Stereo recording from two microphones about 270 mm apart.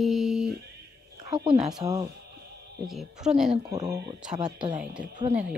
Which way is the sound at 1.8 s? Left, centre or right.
Centre.